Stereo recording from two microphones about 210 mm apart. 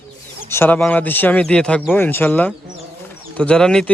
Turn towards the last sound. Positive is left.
turn(degrees=5)  # may be behind; listen again after turning